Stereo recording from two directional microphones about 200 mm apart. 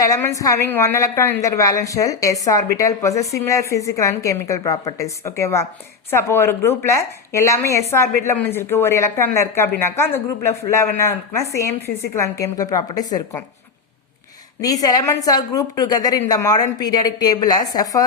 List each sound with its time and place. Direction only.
0.0 s a woman's voice: 15° left (ahead or behind)
12.1 s a woman's voice: 15° left (ahead or behind)
14.6 s a woman's voice: 20° left (ahead or behind)